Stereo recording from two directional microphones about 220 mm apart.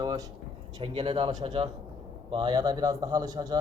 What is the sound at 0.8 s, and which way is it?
A man's voice, 25° right (ahead or behind).